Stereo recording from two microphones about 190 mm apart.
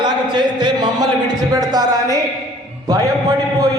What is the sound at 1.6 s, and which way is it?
A man's voice, 20° right (ahead or behind).